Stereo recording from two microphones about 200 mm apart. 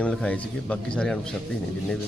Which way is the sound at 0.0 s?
5° left (ahead or behind).